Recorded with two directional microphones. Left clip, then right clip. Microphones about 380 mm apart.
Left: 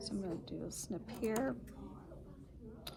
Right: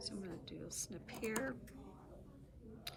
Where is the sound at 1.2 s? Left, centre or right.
Left.